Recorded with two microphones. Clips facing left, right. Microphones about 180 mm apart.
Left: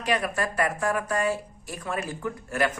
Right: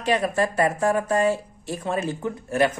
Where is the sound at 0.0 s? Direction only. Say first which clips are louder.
Right 5 dB; 25° right (ahead or behind).